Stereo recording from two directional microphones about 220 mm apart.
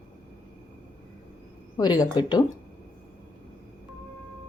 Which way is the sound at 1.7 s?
20° left (ahead or behind).